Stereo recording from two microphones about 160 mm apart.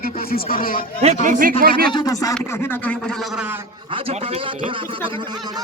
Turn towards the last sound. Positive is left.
turn(degrees=-30)  # may be behind; listen again after turning